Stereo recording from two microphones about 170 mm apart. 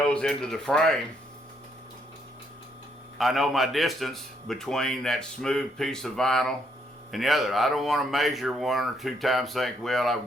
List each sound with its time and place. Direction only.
0.0 s a man's voice: 5° left (ahead or behind)
3.2 s a man's voice: centre (ahead or behind)